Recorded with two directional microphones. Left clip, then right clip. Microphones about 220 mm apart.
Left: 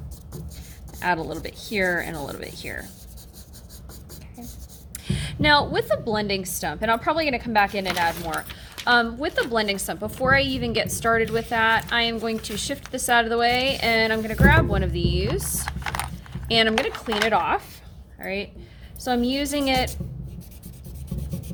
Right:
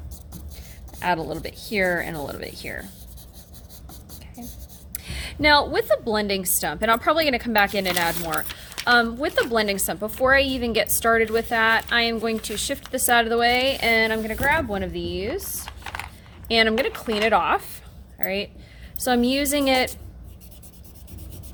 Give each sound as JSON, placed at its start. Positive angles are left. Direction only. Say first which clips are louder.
{"t": 0.9, "sound": "a woman's voice", "louder": "even", "side_deg": -15}
{"t": 5.0, "sound": "a woman's voice", "louder": "right 1 dB", "side_deg": -10}
{"t": 16.5, "sound": "a woman's voice", "louder": "right 1 dB", "side_deg": -10}